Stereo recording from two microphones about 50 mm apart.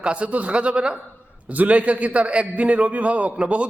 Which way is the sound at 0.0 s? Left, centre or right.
Right.